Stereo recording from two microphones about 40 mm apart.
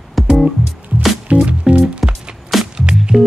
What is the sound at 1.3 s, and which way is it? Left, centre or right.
Music, right.